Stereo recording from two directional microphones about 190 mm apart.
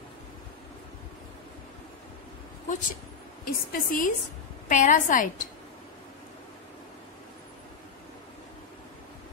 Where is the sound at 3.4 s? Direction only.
50° left (ahead or behind).